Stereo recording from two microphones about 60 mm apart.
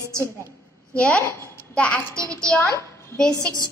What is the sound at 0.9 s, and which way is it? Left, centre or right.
A woman's voice, centre.